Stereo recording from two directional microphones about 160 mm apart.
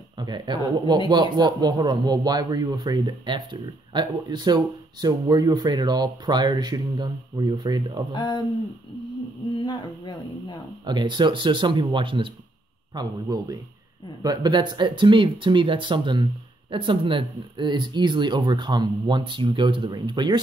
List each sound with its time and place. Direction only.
0.2 s speech: 25° right (ahead or behind)
8.1 s speech: 30° left (ahead or behind)
9.6 s speech: 30° left (ahead or behind)
10.9 s speech: 30° right (ahead or behind)